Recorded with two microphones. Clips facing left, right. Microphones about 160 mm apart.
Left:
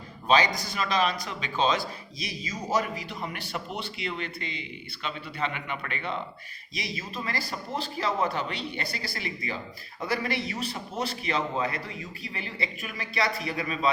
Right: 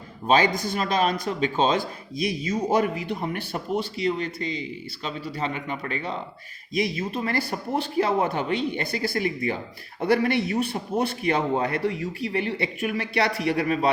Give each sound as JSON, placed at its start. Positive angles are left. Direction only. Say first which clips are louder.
{"t": 0.3, "sound": "a man's voice", "louder": "right 3 dB", "side_deg": -50}
{"t": 6.7, "sound": "a man's voice", "louder": "right 10 dB", "side_deg": -50}